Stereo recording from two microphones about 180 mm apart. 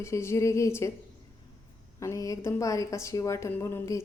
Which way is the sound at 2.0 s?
15° left (ahead or behind).